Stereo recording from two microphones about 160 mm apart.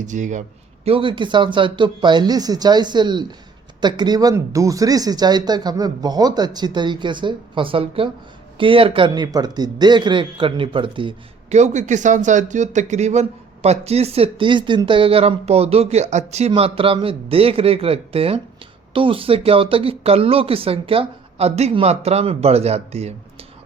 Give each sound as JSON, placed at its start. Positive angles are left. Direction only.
{"t": 0.0, "sound": "speech", "side_deg": -50}
{"t": 0.9, "sound": "speech", "side_deg": -35}
{"t": 11.4, "sound": "speech", "side_deg": -45}